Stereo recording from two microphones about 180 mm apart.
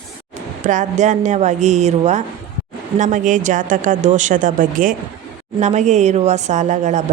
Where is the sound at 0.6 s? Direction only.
40° right (ahead or behind).